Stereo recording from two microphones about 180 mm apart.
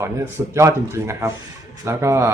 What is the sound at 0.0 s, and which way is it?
Speech, 15° right (ahead or behind).